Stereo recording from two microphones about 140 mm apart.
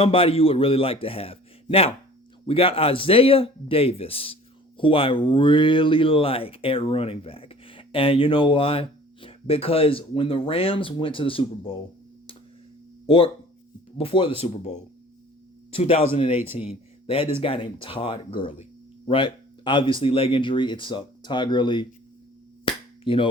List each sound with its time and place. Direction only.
0.0 s a man's voice: 40° left (ahead or behind)
13.1 s a man's voice: 40° left (ahead or behind)
15.7 s a man's voice: 45° left (ahead or behind)
22.6 s a sound: 40° left (ahead or behind)